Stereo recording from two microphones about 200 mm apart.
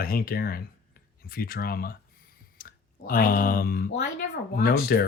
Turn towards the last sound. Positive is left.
turn(degrees=50)  # may be behind; listen again after turning